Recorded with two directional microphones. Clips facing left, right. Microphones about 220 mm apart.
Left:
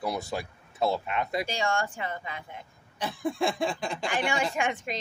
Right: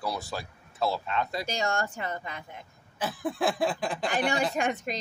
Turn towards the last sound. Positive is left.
turn(degrees=-40)  # may be behind; listen again after turning